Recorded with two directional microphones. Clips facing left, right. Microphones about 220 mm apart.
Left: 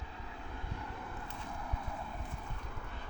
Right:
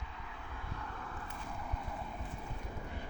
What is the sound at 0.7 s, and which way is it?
Vehicle, 15° left (ahead or behind).